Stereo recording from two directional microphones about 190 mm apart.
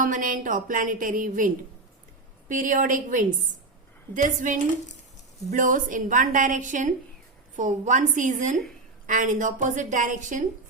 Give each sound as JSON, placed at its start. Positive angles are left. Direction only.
{"t": 0.0, "sound": "a woman's voice", "side_deg": -45}
{"t": 2.5, "sound": "a woman's voice", "side_deg": -45}